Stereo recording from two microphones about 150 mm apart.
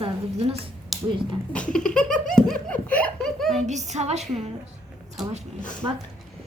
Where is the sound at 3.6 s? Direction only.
50° right (ahead or behind).